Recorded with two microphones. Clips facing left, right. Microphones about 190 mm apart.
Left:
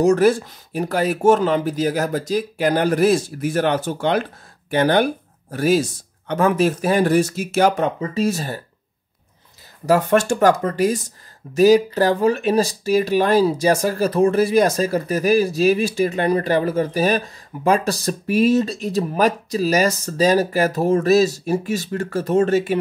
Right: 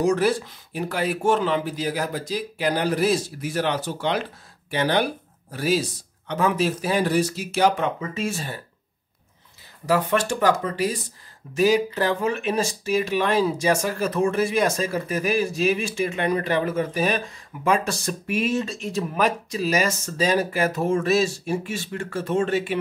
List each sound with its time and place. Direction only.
0.0 s speech: 45° left (ahead or behind)
9.8 s speech: 45° left (ahead or behind)